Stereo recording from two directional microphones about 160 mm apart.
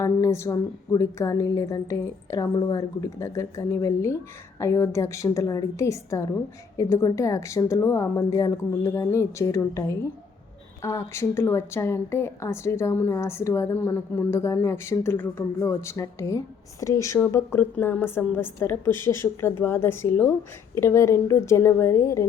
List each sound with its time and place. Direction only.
0.0 s a woman's voice: 20° left (ahead or behind)